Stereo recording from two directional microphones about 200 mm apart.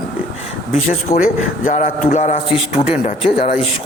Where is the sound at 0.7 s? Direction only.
40° left (ahead or behind).